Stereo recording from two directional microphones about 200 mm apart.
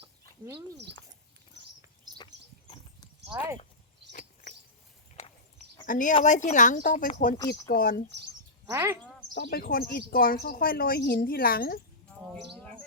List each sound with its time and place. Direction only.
1.6 s a sound: 60° right (ahead or behind)
2.1 s horse: 25° left (ahead or behind)
3.3 s speech: 15° right (ahead or behind)
4.1 s a sound: 40° left (ahead or behind)
5.8 s speech: 40° left (ahead or behind)
7.3 s speech: 15° left (ahead or behind)
7.7 s a woman's voice: 50° left (ahead or behind)
8.7 s speech: 15° right (ahead or behind)
9.3 s a woman's voice: 55° left (ahead or behind)